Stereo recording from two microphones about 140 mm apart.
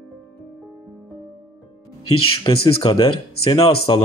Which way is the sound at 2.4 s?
30° left (ahead or behind).